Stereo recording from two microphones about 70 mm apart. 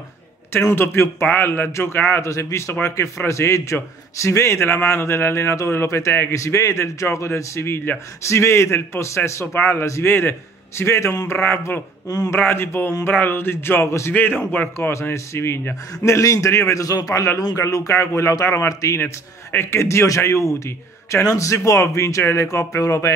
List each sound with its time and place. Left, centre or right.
0.5 s speech: left
2.2 s a man's voice: left
14.9 s speech: left
15.9 s a man's voice: left
18.7 s speech: left
18.9 s a man's voice: left